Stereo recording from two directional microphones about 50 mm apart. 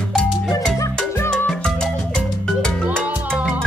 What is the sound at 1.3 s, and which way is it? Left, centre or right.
Salsa music, centre.